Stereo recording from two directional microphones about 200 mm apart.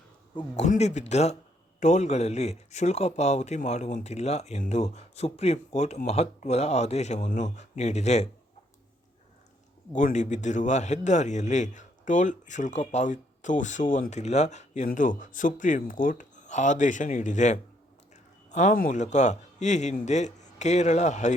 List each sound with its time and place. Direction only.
0.3 s a man's voice: 35° left (ahead or behind)
9.9 s a man's voice: 40° left (ahead or behind)